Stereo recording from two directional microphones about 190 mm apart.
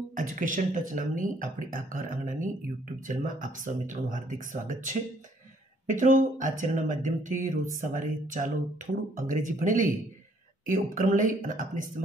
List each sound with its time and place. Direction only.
0.1 s speech: 45° right (ahead or behind)
5.9 s speech: 45° right (ahead or behind)